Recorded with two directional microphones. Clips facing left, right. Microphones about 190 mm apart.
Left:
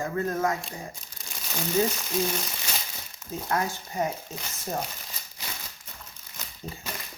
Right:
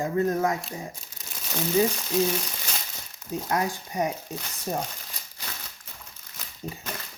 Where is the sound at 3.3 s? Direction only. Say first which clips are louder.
Right 2 dB; 15° right (ahead or behind).